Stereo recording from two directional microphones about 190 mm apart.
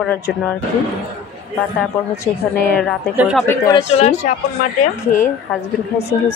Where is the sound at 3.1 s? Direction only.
5° right (ahead or behind).